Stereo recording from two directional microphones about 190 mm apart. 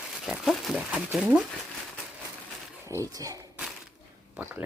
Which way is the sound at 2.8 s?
15° right (ahead or behind).